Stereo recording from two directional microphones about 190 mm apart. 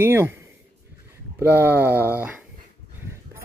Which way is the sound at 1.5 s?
10° right (ahead or behind).